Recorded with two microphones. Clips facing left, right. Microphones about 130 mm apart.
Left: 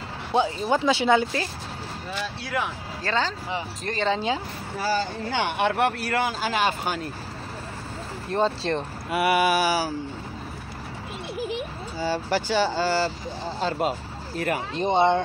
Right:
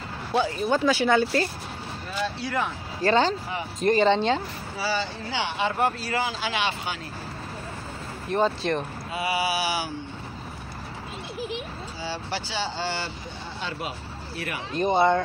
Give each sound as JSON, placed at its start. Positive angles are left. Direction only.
{"t": 0.3, "sound": "speech", "side_deg": 15}
{"t": 2.4, "sound": "speech", "side_deg": 0}
{"t": 3.1, "sound": "speech", "side_deg": -20}
{"t": 4.1, "sound": "speech", "side_deg": 10}
{"t": 4.7, "sound": "speech", "side_deg": 45}
{"t": 8.3, "sound": "speech", "side_deg": 30}
{"t": 9.1, "sound": "speech", "side_deg": 60}
{"t": 12.0, "sound": "speech", "side_deg": 45}
{"t": 14.8, "sound": "speech", "side_deg": 25}